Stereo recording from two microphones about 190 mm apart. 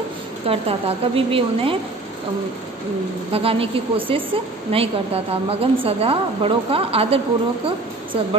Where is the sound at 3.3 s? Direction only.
30° right (ahead or behind).